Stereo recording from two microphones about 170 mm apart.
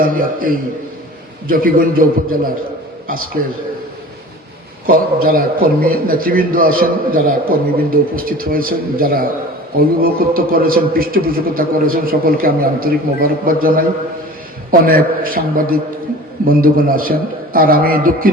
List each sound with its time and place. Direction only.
0.0 s a man's voice: 55° right (ahead or behind)
4.9 s a man's voice: 60° right (ahead or behind)